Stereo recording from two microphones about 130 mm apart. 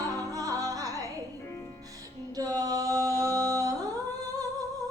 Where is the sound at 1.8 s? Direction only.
25° right (ahead or behind).